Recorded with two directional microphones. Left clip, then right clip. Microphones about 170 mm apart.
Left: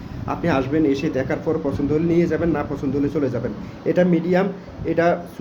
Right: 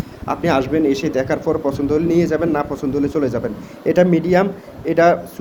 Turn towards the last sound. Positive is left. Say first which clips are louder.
# right 5 dB
turn(degrees=-15)  # may be behind; listen again after turning